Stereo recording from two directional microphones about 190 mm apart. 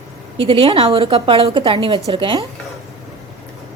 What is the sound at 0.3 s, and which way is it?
A woman's voice, 30° right (ahead or behind).